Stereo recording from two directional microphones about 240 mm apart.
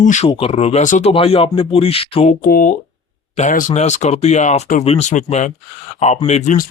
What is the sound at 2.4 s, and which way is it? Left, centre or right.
Speech, left.